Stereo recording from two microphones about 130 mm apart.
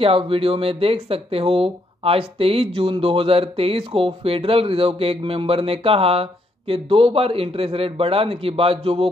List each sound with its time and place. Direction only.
0.0 s speech: 45° right (ahead or behind)